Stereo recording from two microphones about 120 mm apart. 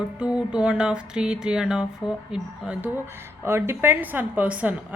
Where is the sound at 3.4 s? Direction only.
20° right (ahead or behind).